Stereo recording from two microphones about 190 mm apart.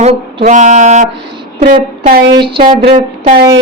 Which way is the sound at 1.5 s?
50° right (ahead or behind).